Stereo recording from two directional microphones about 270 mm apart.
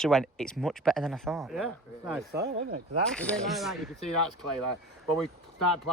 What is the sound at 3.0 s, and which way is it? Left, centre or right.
Speech, centre.